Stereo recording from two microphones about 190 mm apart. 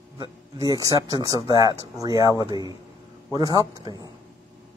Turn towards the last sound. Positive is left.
turn(degrees=-20)  # may be behind; listen again after turning